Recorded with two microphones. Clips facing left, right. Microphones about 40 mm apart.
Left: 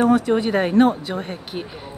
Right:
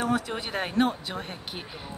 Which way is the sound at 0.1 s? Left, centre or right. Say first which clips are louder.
Left 11 dB; centre.